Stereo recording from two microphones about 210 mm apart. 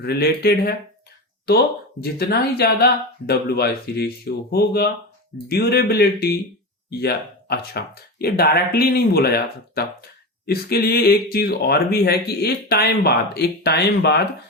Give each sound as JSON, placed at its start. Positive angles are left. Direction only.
{"t": 0.0, "sound": "speech", "side_deg": 50}